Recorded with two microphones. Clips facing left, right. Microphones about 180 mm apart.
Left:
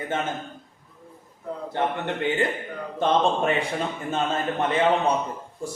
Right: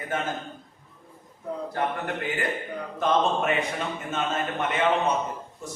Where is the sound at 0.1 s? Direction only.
25° left (ahead or behind).